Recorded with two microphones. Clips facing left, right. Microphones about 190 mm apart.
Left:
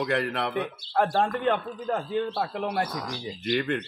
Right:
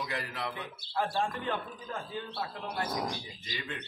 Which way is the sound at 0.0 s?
65° left (ahead or behind).